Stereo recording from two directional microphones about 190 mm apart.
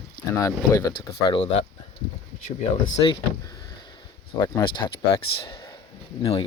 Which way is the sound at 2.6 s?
35° left (ahead or behind).